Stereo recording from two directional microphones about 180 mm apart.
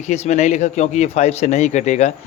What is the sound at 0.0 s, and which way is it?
Speech, 40° left (ahead or behind).